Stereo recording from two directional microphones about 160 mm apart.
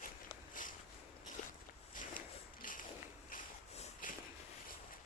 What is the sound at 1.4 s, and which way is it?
Walk, 55° left (ahead or behind).